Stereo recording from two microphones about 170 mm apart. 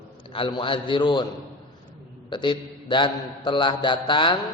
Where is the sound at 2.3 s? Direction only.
25° left (ahead or behind).